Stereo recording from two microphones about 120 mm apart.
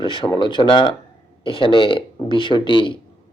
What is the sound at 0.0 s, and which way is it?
A man's voice, 45° left (ahead or behind).